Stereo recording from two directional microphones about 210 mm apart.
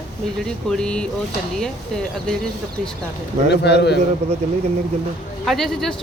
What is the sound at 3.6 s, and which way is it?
Speech, 55° left (ahead or behind).